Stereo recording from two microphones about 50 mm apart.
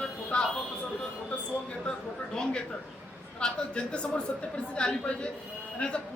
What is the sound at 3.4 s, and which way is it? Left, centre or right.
A man's voice, left.